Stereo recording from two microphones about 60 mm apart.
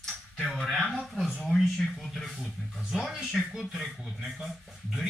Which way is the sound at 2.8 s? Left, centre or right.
Centre.